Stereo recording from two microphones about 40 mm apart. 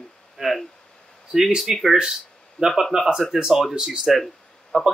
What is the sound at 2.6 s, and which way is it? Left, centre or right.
Speech, left.